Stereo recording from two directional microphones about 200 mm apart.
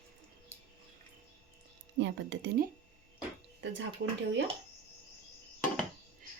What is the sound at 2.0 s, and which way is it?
Speech, 60° right (ahead or behind).